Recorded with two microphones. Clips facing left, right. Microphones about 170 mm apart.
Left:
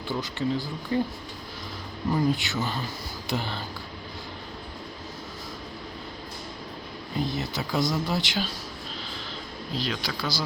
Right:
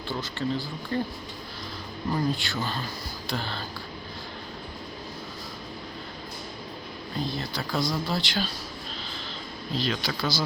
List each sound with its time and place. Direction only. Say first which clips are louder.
0.1 s speech: left 2 dB; 15° left (ahead or behind)
2.3 s speech: left 2 dB; 15° left (ahead or behind)
7.2 s speech: left 2 dB; 20° left (ahead or behind)
9.7 s speech: right 2 dB; 10° left (ahead or behind)